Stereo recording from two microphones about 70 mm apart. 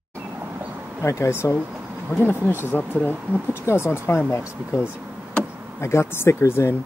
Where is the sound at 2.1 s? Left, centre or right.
Left.